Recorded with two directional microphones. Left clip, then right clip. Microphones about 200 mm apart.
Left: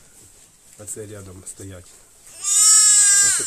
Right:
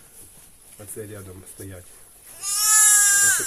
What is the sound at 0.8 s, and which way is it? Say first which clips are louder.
Speech: left 2 dB; 15° left (ahead or behind).